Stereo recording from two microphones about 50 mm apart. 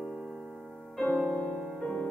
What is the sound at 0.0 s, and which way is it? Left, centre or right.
Keyboard, centre.